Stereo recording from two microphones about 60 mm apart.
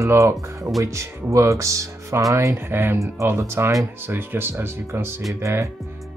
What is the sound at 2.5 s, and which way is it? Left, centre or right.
Speech, right.